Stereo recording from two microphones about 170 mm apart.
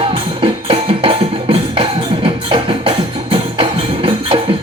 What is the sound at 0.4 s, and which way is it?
Music, 30° right (ahead or behind).